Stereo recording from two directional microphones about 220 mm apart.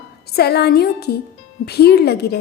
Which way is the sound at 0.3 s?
45° left (ahead or behind).